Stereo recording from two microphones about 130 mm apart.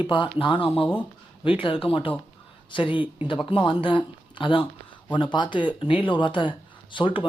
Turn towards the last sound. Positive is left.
turn(degrees=40)  # may be behind; listen again after turning